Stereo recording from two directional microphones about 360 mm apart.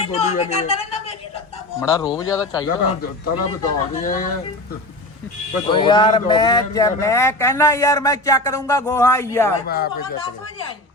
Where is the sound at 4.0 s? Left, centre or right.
Left.